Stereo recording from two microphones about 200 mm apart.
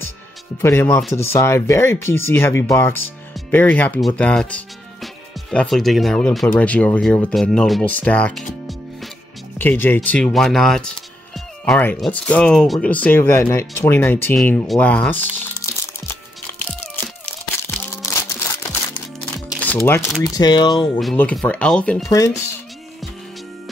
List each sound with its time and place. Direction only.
0.6 s speech: 10° left (ahead or behind)
9.6 s speech: 10° left (ahead or behind)
15.3 s music: 15° left (ahead or behind)
18.1 s a sound: 15° left (ahead or behind)
19.3 s music: 5° left (ahead or behind)
20.2 s speech: 20° left (ahead or behind)
21.0 s speech: 5° left (ahead or behind)
22.0 s speech: 15° left (ahead or behind)